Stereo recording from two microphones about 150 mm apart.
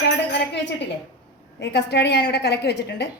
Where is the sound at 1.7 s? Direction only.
90° left.